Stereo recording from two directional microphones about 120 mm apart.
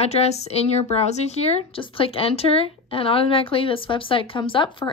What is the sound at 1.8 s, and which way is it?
Speech, 50° left (ahead or behind).